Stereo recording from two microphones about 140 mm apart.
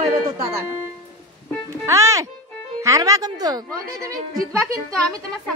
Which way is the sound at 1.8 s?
20° right (ahead or behind).